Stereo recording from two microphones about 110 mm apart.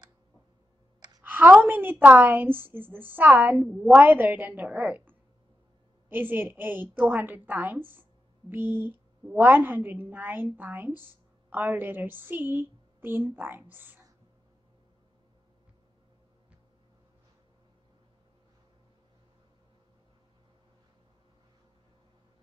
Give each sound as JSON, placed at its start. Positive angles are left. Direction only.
{"t": 1.2, "sound": "a woman's voice", "side_deg": -15}